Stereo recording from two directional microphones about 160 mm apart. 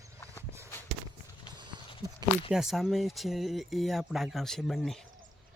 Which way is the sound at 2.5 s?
Centre (ahead or behind).